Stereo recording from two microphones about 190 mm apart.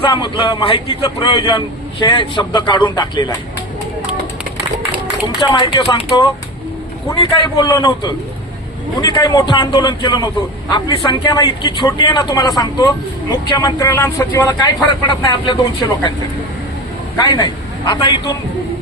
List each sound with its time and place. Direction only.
0.0 s a man's voice: 20° left (ahead or behind)
5.5 s a man's voice: 20° left (ahead or behind)
17.2 s a man's voice: 25° left (ahead or behind)